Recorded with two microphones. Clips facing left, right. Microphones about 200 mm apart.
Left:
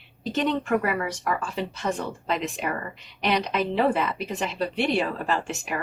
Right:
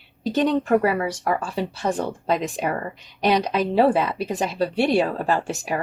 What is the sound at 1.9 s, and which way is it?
A woman's voice, 45° right (ahead or behind).